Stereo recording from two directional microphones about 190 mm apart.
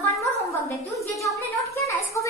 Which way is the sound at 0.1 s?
15° left (ahead or behind).